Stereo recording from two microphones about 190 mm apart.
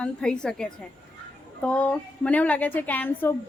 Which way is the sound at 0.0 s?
5° left (ahead or behind).